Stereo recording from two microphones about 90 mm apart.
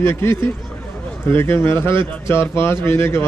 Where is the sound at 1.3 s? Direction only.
25° left (ahead or behind).